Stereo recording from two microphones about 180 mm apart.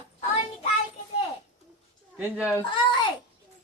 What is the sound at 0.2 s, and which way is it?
Child singing, 35° left (ahead or behind).